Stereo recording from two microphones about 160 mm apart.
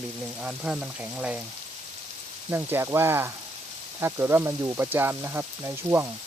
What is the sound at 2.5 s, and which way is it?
Speech, 15° right (ahead or behind).